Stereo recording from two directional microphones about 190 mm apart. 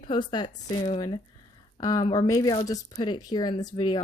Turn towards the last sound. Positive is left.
turn(degrees=25)  # may be behind; listen again after turning